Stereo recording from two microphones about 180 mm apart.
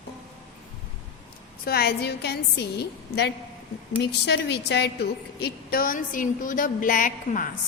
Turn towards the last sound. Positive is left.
turn(degrees=50)  # may be behind; listen again after turning